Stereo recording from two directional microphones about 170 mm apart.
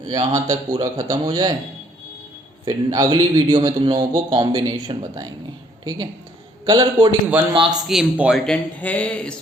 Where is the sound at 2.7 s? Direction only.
25° right (ahead or behind).